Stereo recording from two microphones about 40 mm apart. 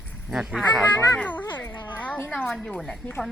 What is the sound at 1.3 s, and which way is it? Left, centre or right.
Speech, left.